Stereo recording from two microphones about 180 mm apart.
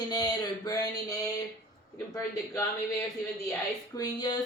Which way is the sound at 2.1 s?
15° left (ahead or behind).